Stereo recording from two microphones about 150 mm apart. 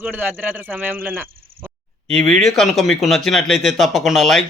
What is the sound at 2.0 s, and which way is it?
A man's voice, 5° left (ahead or behind).